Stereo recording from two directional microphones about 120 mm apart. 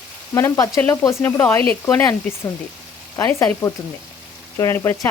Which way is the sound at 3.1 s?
25° left (ahead or behind).